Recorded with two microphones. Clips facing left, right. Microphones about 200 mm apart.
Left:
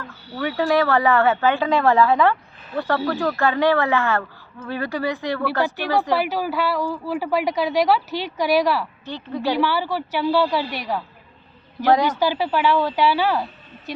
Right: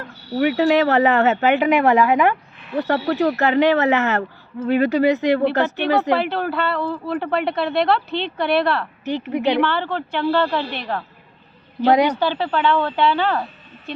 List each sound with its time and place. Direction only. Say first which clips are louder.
0.3 s speech: right 4 dB; 20° right (ahead or behind)
6.1 s a woman's voice: right 1 dB; 5° left (ahead or behind)
9.0 s speech: right 6 dB; 20° right (ahead or behind)
9.6 s a woman's voice: right 1 dB; 5° left (ahead or behind)
12.2 s a woman's voice: even; 10° left (ahead or behind)